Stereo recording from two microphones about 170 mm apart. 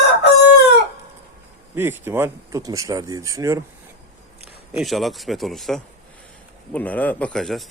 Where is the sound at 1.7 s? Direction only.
15° right (ahead or behind).